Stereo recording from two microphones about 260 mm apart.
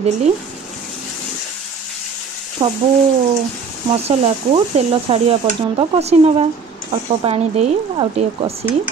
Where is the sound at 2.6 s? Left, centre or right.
Right.